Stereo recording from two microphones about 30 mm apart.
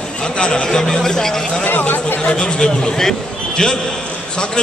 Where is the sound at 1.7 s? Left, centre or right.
Left.